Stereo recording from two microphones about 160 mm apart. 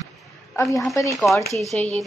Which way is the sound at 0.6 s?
20° left (ahead or behind).